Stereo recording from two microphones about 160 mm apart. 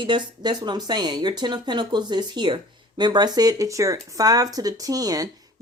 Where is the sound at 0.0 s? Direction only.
30° right (ahead or behind).